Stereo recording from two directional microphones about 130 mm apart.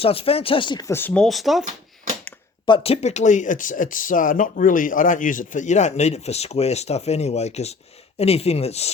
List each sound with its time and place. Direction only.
0.0 s speech: 45° left (ahead or behind)
0.9 s speech: 15° left (ahead or behind)
1.2 s speech: centre (ahead or behind)
2.6 s speech: 45° left (ahead or behind)